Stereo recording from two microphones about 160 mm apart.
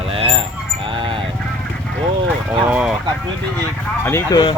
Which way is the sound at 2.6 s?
5° right (ahead or behind).